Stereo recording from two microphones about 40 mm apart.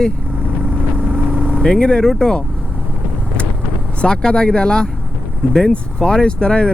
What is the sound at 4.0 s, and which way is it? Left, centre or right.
Speech, left.